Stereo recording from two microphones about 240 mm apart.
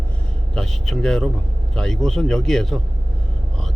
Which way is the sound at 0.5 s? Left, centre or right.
Centre.